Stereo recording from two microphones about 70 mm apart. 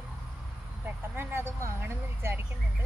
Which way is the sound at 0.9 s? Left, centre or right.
Right.